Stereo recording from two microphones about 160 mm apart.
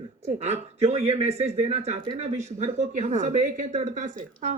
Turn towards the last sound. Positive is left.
turn(degrees=-55)  # may be behind; listen again after turning